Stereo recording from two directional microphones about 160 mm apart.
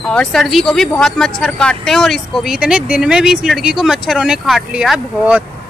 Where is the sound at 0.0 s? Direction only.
5° left (ahead or behind).